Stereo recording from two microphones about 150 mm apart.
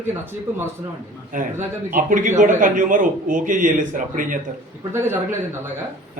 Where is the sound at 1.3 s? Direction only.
60° right (ahead or behind).